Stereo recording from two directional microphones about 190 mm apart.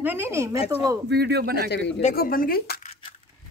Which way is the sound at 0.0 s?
10° right (ahead or behind).